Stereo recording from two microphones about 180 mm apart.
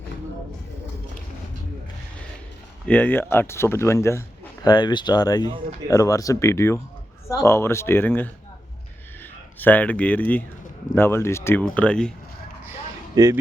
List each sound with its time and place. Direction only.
2.8 s speech: 10° left (ahead or behind)
9.6 s speech: 10° left (ahead or behind)
13.2 s speech: 20° right (ahead or behind)